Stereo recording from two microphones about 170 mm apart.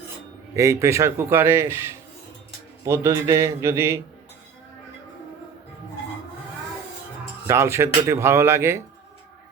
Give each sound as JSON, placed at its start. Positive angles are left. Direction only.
{"t": 0.5, "sound": "a man's voice", "side_deg": -15}
{"t": 7.4, "sound": "a man's voice", "side_deg": -15}